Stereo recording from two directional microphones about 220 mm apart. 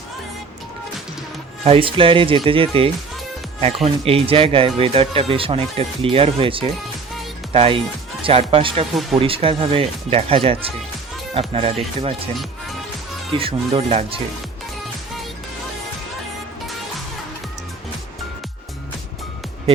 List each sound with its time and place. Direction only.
1.6 s speech: 25° right (ahead or behind)
13.3 s speech: 25° right (ahead or behind)